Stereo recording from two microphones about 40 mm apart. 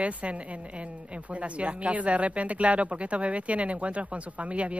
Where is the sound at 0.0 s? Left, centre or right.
Right.